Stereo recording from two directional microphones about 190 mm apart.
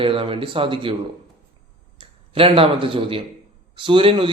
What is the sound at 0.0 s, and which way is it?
Speech, 25° right (ahead or behind).